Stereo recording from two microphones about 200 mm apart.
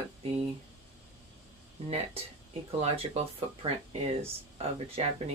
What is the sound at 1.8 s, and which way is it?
Speech, 30° right (ahead or behind).